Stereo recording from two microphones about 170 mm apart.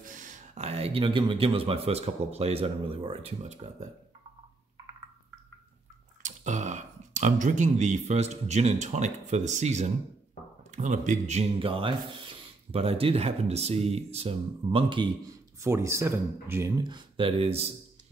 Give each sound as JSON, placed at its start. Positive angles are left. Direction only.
{"t": 0.0, "sound": "a man's voice", "side_deg": -50}
{"t": 6.2, "sound": "speech", "side_deg": -45}
{"t": 15.6, "sound": "speech", "side_deg": -15}